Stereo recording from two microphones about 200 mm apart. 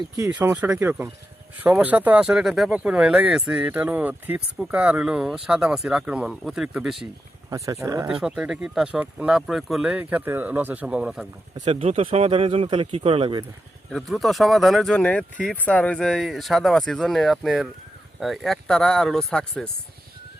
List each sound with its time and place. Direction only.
0.2 s speech: 10° right (ahead or behind)
7.5 s speech: 15° right (ahead or behind)
8.0 s speech: 5° right (ahead or behind)
11.5 s speech: 30° right (ahead or behind)
13.9 s speech: centre (ahead or behind)